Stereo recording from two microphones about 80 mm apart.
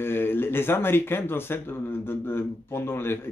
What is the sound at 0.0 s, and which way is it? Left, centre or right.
Speech, left.